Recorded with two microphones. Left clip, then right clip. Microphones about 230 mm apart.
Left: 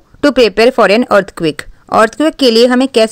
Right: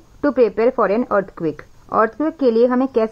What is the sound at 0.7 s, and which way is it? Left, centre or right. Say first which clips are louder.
Speech: left 8 dB; left.